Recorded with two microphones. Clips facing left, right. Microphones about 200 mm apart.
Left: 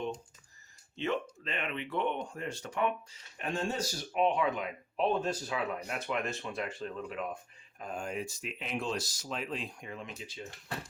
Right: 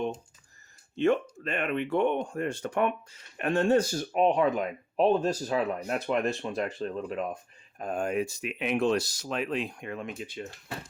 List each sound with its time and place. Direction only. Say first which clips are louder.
0.9 s speech: right 9 dB; 50° right (ahead or behind)
7.8 s speech: right 8 dB; 55° right (ahead or behind)